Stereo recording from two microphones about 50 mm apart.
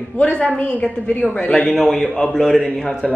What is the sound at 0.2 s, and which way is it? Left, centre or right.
Speech, centre.